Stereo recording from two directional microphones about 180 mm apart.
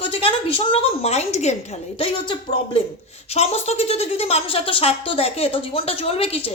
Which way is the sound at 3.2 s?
35° left (ahead or behind).